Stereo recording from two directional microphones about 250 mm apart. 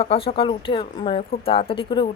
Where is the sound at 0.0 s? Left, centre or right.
Left.